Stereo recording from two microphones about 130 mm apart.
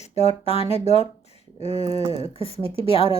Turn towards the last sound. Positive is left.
turn(degrees=45)  # may be behind; listen again after turning